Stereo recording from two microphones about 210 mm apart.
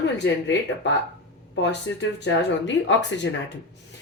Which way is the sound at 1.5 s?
60° left (ahead or behind).